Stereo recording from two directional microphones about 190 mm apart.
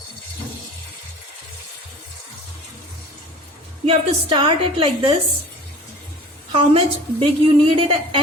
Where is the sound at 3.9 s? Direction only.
25° right (ahead or behind).